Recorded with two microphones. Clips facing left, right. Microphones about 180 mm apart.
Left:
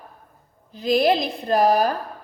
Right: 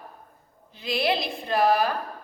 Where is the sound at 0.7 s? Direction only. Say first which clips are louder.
Left 7 dB; 40° left (ahead or behind).